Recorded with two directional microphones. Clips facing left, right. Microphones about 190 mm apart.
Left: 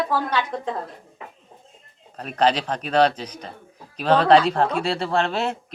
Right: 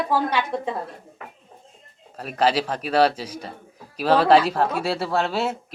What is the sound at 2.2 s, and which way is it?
A woman's voice, 5° right (ahead or behind).